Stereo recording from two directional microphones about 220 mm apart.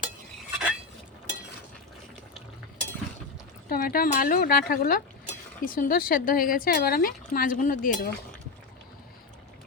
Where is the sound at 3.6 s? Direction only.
40° left (ahead or behind).